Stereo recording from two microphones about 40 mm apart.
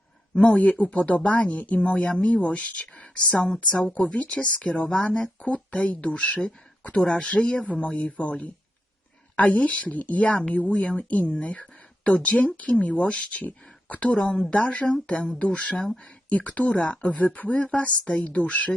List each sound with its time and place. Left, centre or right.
0.4 s speech: left
11.6 s a sound: left
12.2 s speech: left
14.2 s speech: left
14.5 s speech: left
17.2 s speech: left